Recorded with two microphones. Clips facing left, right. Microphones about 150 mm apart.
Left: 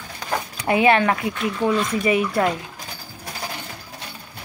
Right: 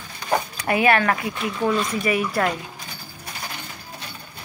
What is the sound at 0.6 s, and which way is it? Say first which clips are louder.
Speech: left 4 dB; 20° left (ahead or behind).